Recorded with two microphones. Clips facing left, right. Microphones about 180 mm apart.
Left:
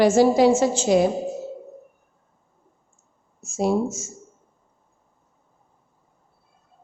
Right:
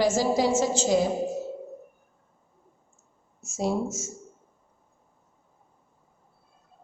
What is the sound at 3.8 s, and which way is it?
Speech, 30° left (ahead or behind).